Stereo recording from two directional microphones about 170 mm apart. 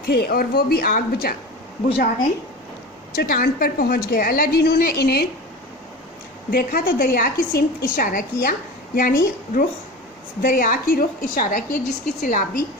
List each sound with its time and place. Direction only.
0.0 s a woman's voice: 65° left (ahead or behind)
3.2 s a woman's voice: 60° left (ahead or behind)
6.5 s a woman's voice: 60° left (ahead or behind)